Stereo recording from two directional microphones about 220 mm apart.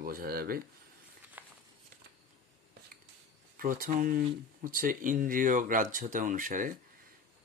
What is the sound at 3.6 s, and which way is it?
Speech, 40° right (ahead or behind).